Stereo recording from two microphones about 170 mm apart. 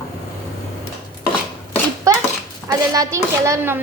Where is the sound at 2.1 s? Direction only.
20° right (ahead or behind).